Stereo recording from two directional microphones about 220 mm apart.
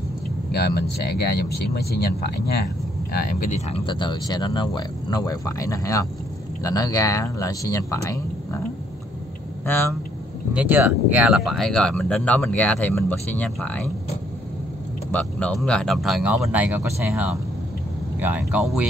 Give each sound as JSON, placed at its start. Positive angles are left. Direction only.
{"t": 0.5, "sound": "speech", "side_deg": 45}
{"t": 9.7, "sound": "speech", "side_deg": 10}
{"t": 10.5, "sound": "speech", "side_deg": -5}
{"t": 15.0, "sound": "speech", "side_deg": 5}